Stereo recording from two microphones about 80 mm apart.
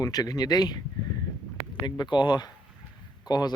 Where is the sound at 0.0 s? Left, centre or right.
Left.